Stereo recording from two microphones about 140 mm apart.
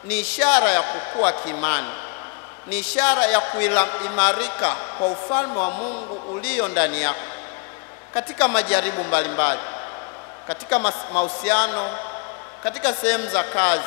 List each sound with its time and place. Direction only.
0.4 s a man's voice: 20° left (ahead or behind)